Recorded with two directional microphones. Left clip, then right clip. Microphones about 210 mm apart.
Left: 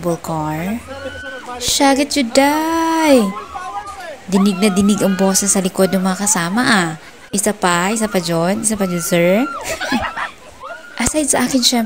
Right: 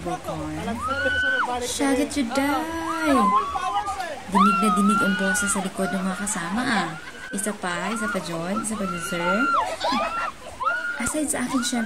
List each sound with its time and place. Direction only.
1.6 s speech: 40° left (ahead or behind)
4.6 s speech: 40° left (ahead or behind)
11.0 s speech: 40° left (ahead or behind)